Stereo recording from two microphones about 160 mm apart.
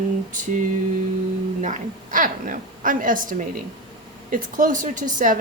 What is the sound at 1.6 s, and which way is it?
A woman's voice, 55° right (ahead or behind).